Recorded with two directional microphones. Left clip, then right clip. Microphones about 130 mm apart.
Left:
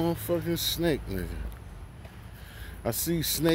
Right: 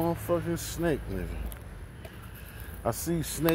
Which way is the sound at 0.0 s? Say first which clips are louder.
Even; 50° left (ahead or behind).